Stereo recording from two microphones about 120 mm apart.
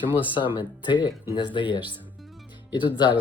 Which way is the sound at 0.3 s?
40° left (ahead or behind).